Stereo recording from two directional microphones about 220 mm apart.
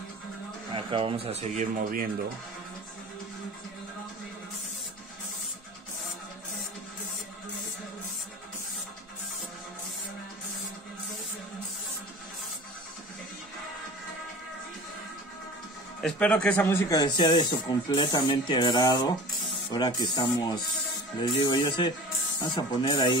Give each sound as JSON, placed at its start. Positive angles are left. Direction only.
{"t": 0.7, "sound": "speech", "side_deg": -25}
{"t": 16.0, "sound": "speech", "side_deg": 5}